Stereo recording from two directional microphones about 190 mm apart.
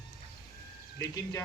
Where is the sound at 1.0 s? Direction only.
15° left (ahead or behind).